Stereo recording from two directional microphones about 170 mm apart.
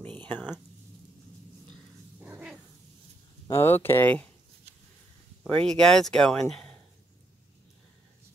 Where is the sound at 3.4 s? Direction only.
15° left (ahead or behind).